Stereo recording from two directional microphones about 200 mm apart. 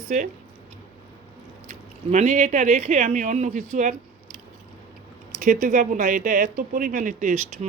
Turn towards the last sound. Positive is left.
turn(degrees=-40)  # may be behind; listen again after turning